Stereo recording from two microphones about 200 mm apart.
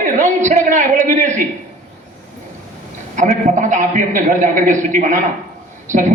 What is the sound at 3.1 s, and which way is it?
A woman's voice, 40° right (ahead or behind).